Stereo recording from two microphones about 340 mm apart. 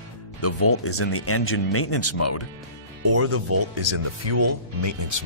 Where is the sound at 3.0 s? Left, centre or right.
Right.